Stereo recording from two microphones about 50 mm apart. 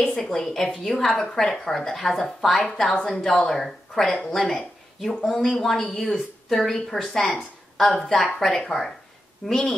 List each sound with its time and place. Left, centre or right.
0.1 s a woman's voice: centre